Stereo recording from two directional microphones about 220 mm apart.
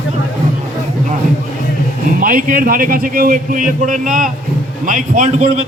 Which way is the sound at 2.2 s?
40° right (ahead or behind).